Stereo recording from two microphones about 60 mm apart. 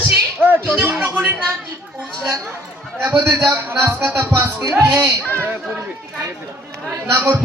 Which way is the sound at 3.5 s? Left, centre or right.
Right.